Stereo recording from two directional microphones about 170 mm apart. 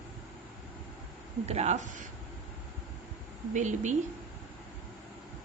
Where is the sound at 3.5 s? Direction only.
45° right (ahead or behind).